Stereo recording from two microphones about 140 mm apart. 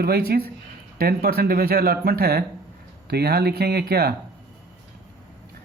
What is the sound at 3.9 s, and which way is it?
Speech, 90° right.